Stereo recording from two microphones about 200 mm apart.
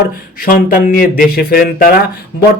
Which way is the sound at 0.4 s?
45° left (ahead or behind).